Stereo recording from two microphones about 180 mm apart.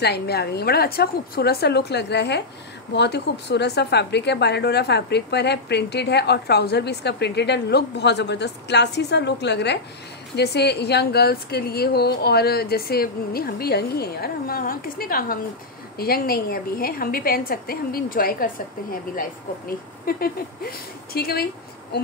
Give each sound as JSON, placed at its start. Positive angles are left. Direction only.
{"t": 0.0, "sound": "a woman's voice", "side_deg": 65}